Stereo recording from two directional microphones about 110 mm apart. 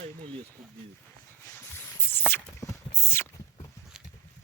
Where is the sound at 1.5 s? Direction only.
20° left (ahead or behind).